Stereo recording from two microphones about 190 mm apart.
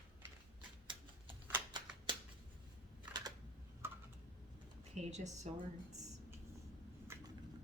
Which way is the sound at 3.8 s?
10° right (ahead or behind).